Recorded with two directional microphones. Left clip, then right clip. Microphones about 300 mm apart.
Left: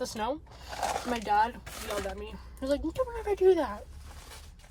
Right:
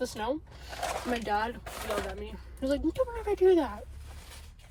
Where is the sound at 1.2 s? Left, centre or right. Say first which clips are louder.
Left 4 dB; centre.